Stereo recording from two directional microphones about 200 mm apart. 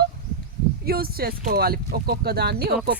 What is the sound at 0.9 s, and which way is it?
Speech, 50° right (ahead or behind).